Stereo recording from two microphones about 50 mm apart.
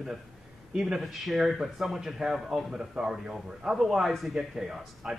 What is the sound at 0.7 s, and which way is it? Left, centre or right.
Speech, centre.